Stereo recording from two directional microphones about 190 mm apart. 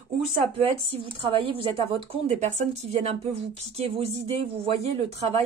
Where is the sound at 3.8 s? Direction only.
35° right (ahead or behind).